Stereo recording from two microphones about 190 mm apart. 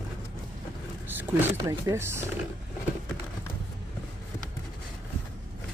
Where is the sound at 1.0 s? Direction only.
10° right (ahead or behind).